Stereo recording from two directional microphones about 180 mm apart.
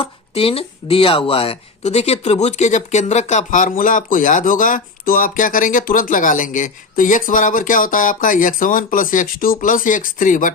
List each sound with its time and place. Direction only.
0.0 s speech: 30° left (ahead or behind); by 10.5 s 45° left (ahead or behind)